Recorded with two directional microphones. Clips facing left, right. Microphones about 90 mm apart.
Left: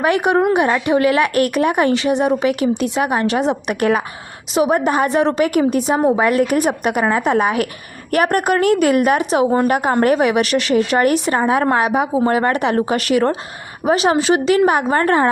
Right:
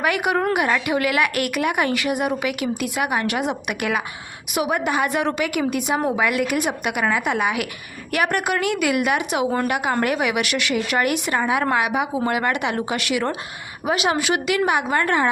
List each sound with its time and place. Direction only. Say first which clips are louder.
0.0 s a woman's voice: left 6 dB; 30° left (ahead or behind)